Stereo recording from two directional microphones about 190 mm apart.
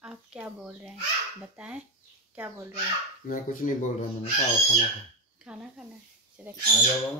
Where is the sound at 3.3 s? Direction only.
45° left (ahead or behind).